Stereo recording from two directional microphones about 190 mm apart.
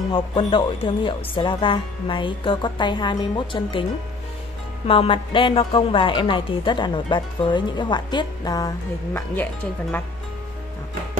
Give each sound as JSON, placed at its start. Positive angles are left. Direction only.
{"t": 0.1, "sound": "a woman's voice", "side_deg": 25}
{"t": 4.8, "sound": "a woman's voice", "side_deg": 30}